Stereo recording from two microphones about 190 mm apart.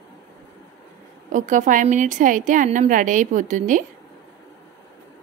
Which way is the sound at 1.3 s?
40° right (ahead or behind).